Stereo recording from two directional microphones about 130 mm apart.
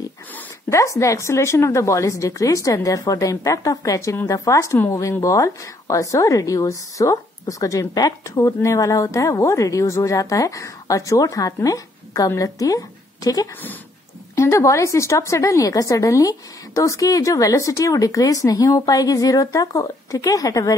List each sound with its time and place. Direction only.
0.7 s a woman's voice: 25° left (ahead or behind)